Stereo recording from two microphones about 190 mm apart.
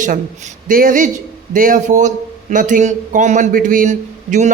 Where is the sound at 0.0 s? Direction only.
40° right (ahead or behind).